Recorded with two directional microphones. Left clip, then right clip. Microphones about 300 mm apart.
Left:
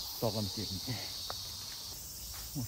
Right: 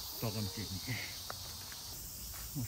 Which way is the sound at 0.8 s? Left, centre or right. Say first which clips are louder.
Left 2 dB; centre.